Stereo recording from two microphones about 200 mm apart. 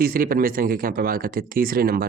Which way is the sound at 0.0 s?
45° right (ahead or behind).